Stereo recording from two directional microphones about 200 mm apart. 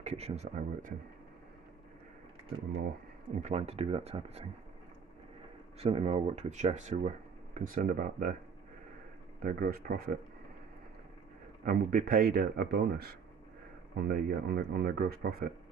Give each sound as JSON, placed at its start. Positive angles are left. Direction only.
{"t": 0.0, "sound": "speech", "side_deg": -35}
{"t": 3.3, "sound": "speech", "side_deg": -35}
{"t": 5.8, "sound": "speech", "side_deg": -30}
{"t": 9.4, "sound": "speech", "side_deg": -45}
{"t": 11.6, "sound": "speech", "side_deg": -45}